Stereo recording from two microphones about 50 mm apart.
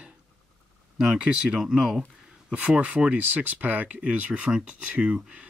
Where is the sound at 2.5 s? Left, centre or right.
Right.